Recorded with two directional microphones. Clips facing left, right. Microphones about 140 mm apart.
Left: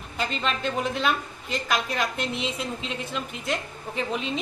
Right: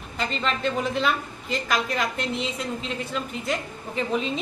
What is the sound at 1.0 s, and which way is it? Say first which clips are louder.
A woman's voice: right 1 dB; 5° left (ahead or behind).